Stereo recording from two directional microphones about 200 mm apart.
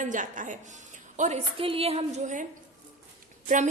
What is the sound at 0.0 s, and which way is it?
A woman's voice, 40° right (ahead or behind).